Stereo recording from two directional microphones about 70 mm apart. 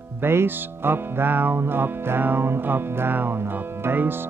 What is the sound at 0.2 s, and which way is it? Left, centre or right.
Music, right.